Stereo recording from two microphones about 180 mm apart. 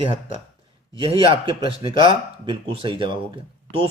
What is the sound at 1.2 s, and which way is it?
Speech, 30° right (ahead or behind).